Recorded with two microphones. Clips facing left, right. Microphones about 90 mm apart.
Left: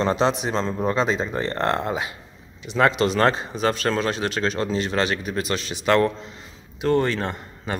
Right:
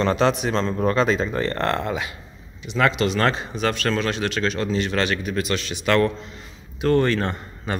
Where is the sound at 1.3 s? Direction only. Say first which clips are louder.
Right 2 dB; 10° left (ahead or behind).